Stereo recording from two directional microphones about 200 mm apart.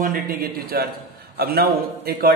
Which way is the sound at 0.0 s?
45° right (ahead or behind).